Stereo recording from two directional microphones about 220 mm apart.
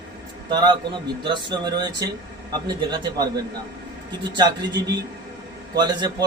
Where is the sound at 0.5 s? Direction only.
20° right (ahead or behind).